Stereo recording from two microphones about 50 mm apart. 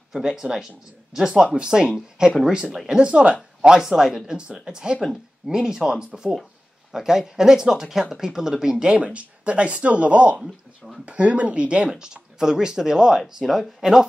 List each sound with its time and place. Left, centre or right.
0.2 s speech: centre
3.1 s speech: right
3.6 s speech: centre
11.9 s speech: centre